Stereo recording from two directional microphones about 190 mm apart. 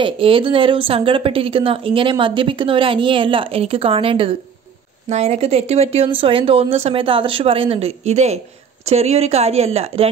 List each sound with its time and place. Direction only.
0.0 s a woman's voice: 30° right (ahead or behind)